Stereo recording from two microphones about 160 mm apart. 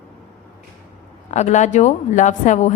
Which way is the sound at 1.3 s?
45° left (ahead or behind).